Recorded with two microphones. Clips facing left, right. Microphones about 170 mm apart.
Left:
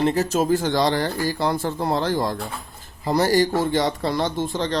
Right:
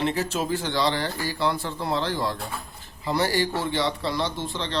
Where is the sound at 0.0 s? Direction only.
40° left (ahead or behind).